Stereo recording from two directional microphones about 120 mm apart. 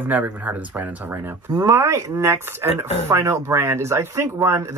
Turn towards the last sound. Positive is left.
turn(degrees=-25)  # may be behind; listen again after turning